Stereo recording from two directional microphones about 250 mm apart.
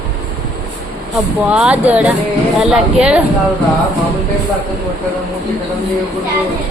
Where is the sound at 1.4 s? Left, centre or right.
Centre.